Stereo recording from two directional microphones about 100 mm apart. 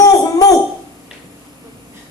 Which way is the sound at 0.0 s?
35° left (ahead or behind).